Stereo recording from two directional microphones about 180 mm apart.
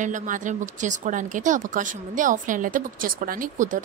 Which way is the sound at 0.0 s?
45° right (ahead or behind).